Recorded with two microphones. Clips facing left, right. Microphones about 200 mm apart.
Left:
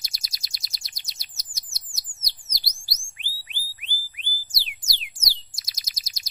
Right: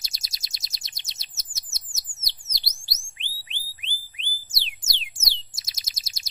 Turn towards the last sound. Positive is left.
turn(degrees=-25)  # may be behind; listen again after turning